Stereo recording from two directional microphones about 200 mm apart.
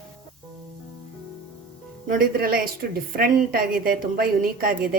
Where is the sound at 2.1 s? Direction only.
45° right (ahead or behind).